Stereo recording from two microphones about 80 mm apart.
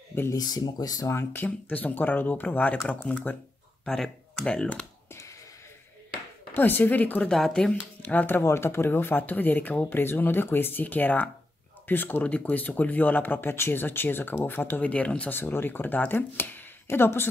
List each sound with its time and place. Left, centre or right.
0.3 s speech: left
1.1 s speech: left
3.8 s speech: centre
6.5 s speech: left
7.2 s speech: centre
8.0 s speech: left
15.3 s speech: left